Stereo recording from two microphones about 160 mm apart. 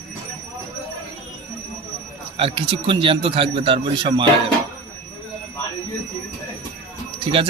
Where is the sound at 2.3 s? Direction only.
35° right (ahead or behind).